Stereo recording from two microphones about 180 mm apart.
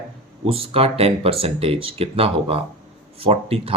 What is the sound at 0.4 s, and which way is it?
Speech, 30° right (ahead or behind).